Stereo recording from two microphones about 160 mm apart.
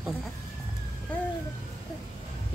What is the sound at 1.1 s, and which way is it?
Speech, 10° left (ahead or behind).